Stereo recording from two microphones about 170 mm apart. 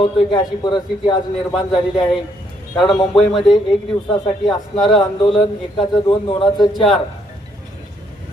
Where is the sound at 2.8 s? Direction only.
30° left (ahead or behind).